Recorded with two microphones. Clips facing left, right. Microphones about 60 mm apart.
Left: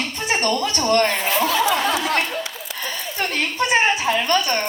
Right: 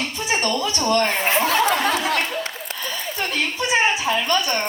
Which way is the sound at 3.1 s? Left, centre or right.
Left.